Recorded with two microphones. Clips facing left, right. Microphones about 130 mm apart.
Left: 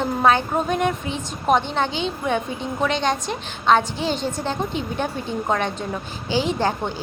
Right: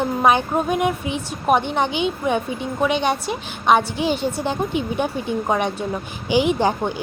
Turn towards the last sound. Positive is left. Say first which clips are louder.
# right 3 dB
turn(degrees=-15)  # may be behind; listen again after turning